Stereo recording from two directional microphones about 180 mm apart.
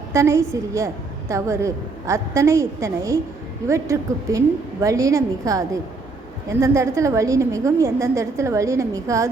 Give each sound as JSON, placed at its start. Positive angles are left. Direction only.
{"t": 0.1, "sound": "a woman's voice", "side_deg": -15}